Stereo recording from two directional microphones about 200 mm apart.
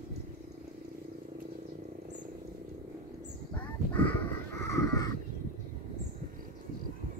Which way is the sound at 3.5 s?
10° left (ahead or behind).